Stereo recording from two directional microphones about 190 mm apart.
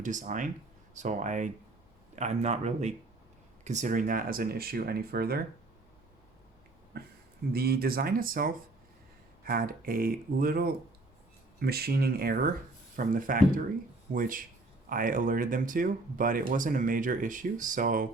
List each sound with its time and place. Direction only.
0.0 s speech: 40° right (ahead or behind)
6.9 s speech: 55° right (ahead or behind)